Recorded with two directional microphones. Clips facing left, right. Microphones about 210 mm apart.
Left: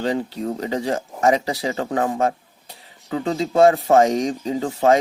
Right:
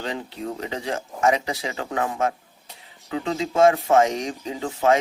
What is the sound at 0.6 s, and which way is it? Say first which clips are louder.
Speech: left 7 dB; 35° left (ahead or behind).